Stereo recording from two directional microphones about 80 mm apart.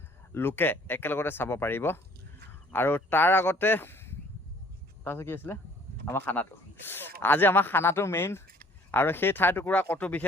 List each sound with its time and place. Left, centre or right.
0.3 s speech: left